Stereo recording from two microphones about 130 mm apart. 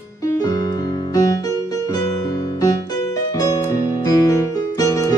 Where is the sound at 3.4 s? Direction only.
30° left (ahead or behind).